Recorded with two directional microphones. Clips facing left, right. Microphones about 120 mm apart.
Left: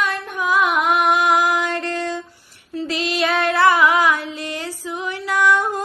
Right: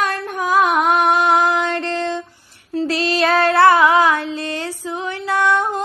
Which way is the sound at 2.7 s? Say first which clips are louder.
Right 4 dB; 35° right (ahead or behind).